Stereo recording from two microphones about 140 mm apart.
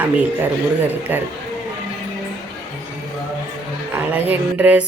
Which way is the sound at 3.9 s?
10° right (ahead or behind).